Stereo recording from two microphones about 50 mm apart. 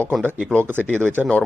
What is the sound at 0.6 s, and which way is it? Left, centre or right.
Speech, right.